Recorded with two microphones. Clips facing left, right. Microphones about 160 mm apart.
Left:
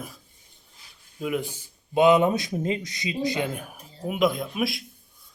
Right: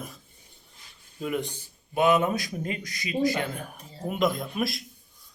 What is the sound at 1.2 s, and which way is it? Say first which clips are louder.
Speech: left 2 dB; 5° left (ahead or behind).